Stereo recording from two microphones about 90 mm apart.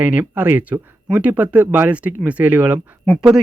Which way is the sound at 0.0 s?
15° right (ahead or behind).